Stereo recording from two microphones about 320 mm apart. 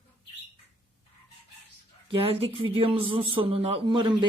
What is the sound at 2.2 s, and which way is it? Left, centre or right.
Speech, centre.